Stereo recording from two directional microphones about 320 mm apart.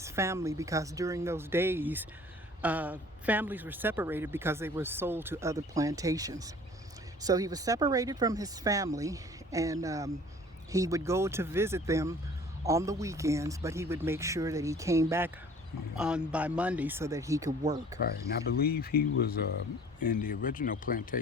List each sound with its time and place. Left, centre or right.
0.0 s speech: centre
18.0 s speech: left